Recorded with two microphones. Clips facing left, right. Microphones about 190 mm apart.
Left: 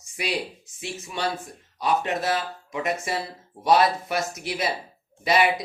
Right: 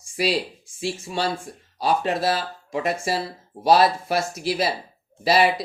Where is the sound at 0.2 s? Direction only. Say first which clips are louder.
Right 5 dB; 35° right (ahead or behind).